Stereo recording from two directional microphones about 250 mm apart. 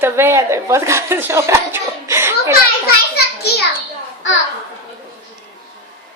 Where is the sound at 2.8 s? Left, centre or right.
Left.